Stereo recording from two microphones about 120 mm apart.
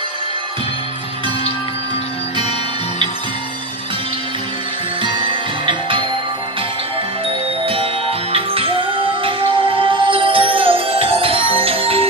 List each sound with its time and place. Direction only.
5.7 s music: 45° right (ahead or behind)
7.6 s music: 50° right (ahead or behind)